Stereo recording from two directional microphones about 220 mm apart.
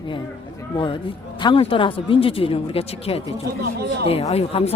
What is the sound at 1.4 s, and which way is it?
Speech, 20° left (ahead or behind).